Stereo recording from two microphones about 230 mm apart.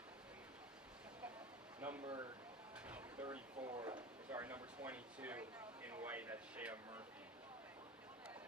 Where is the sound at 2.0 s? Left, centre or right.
Centre.